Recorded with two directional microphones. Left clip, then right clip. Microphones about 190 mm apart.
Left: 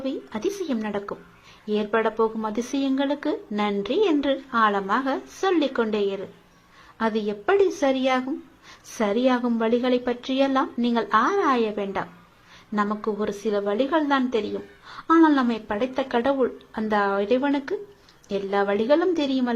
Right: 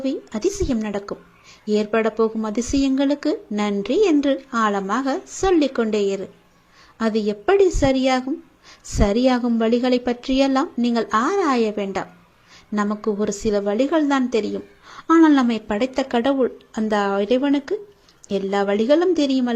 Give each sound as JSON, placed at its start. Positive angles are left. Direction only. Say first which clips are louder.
{"t": 0.0, "sound": "a woman's voice", "louder": "right 5 dB", "side_deg": -40}